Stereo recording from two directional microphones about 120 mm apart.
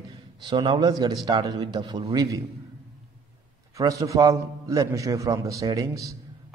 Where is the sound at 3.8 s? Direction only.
25° right (ahead or behind).